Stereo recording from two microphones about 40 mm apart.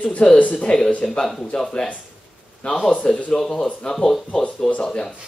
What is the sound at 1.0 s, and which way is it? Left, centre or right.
Speech, centre.